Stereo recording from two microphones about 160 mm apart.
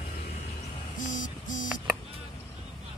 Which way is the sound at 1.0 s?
55° left (ahead or behind).